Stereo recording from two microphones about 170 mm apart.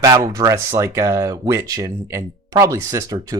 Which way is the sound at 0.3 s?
15° right (ahead or behind).